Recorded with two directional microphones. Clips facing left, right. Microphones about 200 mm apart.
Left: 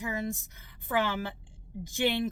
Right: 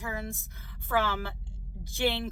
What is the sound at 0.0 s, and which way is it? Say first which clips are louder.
Speech: left 3 dB; 20° left (ahead or behind).